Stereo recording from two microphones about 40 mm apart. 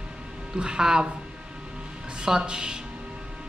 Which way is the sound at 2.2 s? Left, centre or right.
Centre.